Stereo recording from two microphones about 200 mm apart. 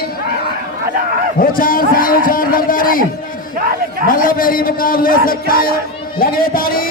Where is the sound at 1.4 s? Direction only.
45° left (ahead or behind).